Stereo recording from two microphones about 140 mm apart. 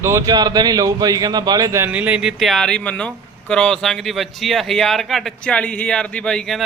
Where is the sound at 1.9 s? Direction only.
10° right (ahead or behind).